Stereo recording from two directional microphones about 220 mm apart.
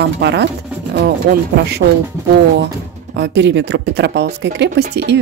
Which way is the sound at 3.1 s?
50° right (ahead or behind).